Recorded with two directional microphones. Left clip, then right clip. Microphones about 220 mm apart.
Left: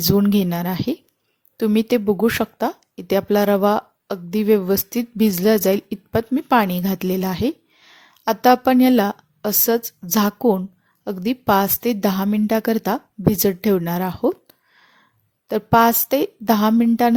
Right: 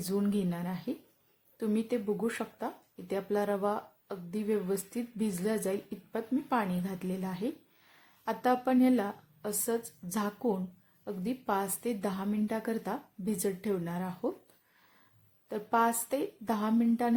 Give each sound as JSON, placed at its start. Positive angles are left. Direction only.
{"t": 0.1, "sound": "a woman's voice", "side_deg": 40}